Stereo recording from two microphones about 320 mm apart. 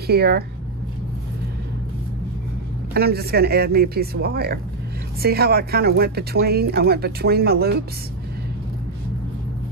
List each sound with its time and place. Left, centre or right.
0.0 s speech: right
2.9 s speech: right